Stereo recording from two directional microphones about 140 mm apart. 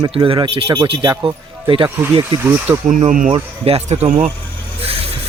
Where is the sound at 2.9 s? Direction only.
60° right (ahead or behind).